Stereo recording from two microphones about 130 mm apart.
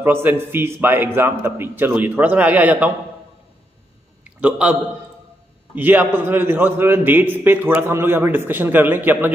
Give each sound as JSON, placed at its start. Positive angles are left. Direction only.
{"t": 0.0, "sound": "a man's voice", "side_deg": -15}
{"t": 4.2, "sound": "a sound", "side_deg": -10}
{"t": 5.8, "sound": "a man's voice", "side_deg": -15}